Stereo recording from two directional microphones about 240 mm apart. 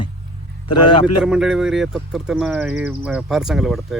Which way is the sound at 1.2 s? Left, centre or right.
Centre.